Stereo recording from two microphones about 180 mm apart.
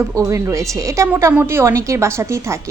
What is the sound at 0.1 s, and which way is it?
A woman's voice, 15° right (ahead or behind).